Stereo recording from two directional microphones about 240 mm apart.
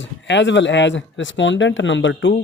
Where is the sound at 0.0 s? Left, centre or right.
Left.